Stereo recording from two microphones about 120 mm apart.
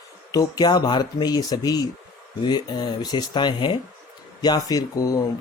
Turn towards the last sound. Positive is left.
turn(degrees=30)  # may be behind; listen again after turning